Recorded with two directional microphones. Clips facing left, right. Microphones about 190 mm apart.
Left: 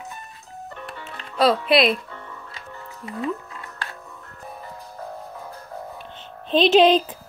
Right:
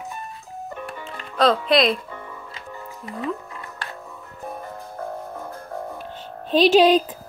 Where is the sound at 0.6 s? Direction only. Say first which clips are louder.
Right 3 dB; 10° right (ahead or behind).